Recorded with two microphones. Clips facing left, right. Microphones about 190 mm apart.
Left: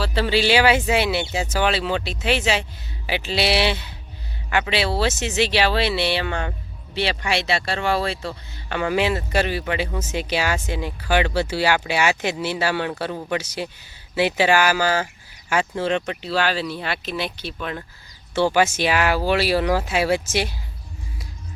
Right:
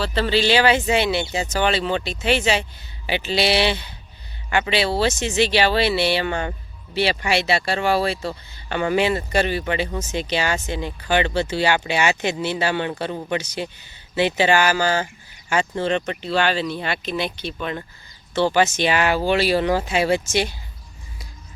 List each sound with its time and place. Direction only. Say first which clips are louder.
0.0 s speech: even; 10° left (ahead or behind)